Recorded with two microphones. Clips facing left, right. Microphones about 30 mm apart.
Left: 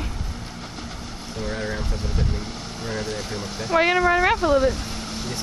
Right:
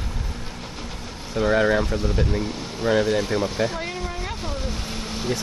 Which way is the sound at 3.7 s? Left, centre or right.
Left.